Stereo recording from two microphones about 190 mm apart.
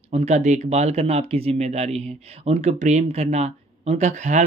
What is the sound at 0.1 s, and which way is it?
Speech, 35° right (ahead or behind).